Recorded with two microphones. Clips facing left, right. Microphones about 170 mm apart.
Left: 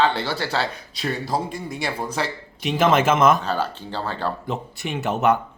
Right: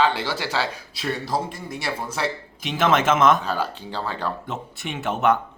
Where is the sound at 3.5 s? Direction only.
10° right (ahead or behind).